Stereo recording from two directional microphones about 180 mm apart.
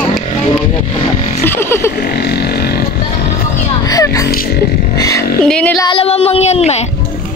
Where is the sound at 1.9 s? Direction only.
60° left (ahead or behind).